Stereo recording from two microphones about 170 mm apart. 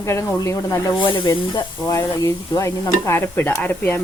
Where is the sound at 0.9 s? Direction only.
30° left (ahead or behind); by 4.0 s 10° left (ahead or behind).